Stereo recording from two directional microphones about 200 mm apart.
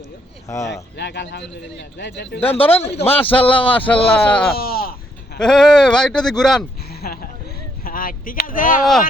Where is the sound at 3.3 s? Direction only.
10° left (ahead or behind).